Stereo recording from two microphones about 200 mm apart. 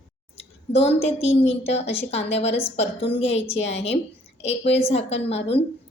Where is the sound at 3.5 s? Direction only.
60° left (ahead or behind).